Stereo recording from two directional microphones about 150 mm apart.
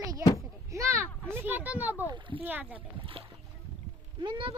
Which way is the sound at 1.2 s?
15° right (ahead or behind).